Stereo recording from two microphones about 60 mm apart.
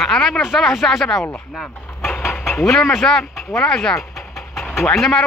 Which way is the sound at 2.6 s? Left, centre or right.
Centre.